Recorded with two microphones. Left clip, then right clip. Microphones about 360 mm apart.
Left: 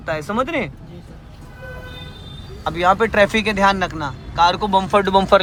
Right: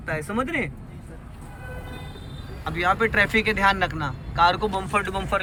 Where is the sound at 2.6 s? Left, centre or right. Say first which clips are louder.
Left 6 dB; centre.